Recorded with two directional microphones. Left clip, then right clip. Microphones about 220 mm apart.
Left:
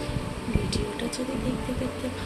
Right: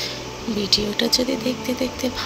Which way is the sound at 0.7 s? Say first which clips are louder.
Right 11 dB; 25° right (ahead or behind).